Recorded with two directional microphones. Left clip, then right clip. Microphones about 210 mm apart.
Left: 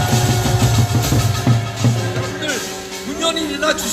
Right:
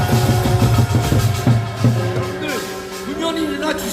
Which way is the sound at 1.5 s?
10° right (ahead or behind).